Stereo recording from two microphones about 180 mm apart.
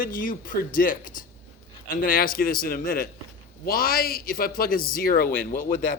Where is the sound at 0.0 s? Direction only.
50° left (ahead or behind).